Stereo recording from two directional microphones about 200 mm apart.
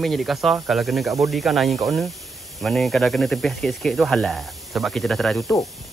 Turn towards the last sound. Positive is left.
turn(degrees=0)  # may be behind; listen again after turning